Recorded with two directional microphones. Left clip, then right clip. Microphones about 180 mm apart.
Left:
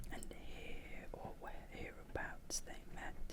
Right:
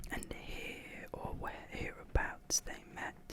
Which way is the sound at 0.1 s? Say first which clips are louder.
Right 9 dB; 25° right (ahead or behind).